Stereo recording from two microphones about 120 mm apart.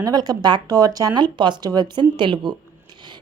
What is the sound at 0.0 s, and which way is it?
A woman's voice, 35° right (ahead or behind).